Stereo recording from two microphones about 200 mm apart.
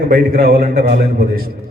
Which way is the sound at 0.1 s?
50° right (ahead or behind).